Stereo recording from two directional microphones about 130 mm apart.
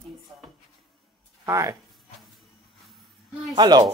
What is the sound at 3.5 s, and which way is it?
Speech, 35° right (ahead or behind).